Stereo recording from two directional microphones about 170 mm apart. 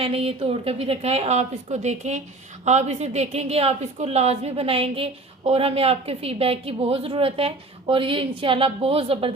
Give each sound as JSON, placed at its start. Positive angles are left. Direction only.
{"t": 0.0, "sound": "a woman's voice", "side_deg": -35}